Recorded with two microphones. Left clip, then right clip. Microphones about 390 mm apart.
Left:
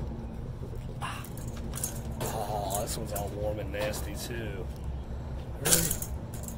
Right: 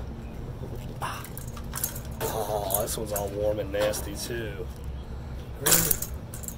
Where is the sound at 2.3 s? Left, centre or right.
Centre.